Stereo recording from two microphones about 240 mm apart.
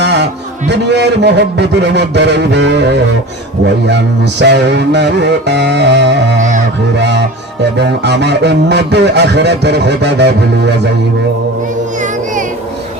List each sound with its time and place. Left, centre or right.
0.0 s a sound: right
0.7 s speech: right
11.9 s music: right